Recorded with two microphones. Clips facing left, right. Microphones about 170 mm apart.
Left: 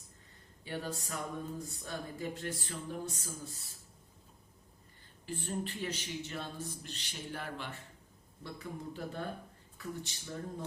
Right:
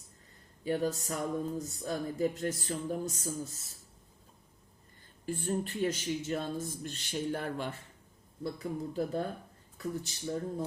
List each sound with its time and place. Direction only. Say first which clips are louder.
0.6 s speech: right 8 dB; 40° right (ahead or behind)
5.2 s a man's voice: right 5 dB; 45° right (ahead or behind)